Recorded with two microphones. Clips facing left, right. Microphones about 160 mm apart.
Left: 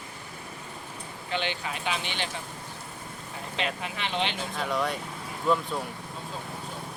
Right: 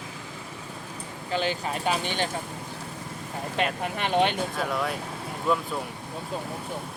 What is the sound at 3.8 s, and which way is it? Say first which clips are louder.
Speech: right 7 dB; 50° right (ahead or behind).